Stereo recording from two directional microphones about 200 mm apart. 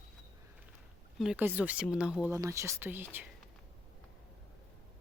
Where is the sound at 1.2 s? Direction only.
5° right (ahead or behind).